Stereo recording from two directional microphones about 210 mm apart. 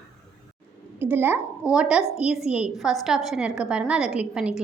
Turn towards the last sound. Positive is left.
turn(degrees=-5)  # may be behind; listen again after turning